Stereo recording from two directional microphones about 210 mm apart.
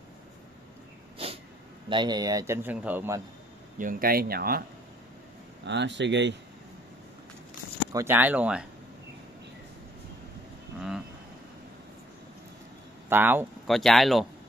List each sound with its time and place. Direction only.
1.1 s a sound: 25° right (ahead or behind)
1.9 s a man's voice: 20° right (ahead or behind)
3.7 s speech: 40° right (ahead or behind)
5.7 s speech: 55° right (ahead or behind)
7.9 s a man's voice: 10° right (ahead or behind)
13.1 s a man's voice: 10° right (ahead or behind)
13.7 s speech: centre (ahead or behind)